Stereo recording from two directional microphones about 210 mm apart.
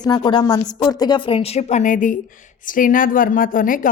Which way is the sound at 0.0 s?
20° left (ahead or behind).